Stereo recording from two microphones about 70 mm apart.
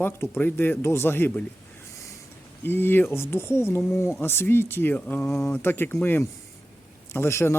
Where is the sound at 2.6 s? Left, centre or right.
Left.